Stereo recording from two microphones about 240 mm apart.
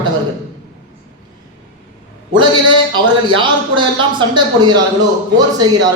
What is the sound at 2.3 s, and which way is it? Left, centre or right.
A man's voice, centre.